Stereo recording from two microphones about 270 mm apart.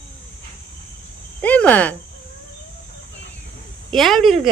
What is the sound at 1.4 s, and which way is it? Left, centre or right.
Cricket, centre.